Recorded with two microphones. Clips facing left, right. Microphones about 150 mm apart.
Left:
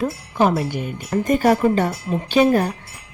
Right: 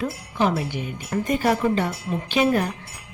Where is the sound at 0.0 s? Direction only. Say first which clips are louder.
Left 4 dB; 45° left (ahead or behind).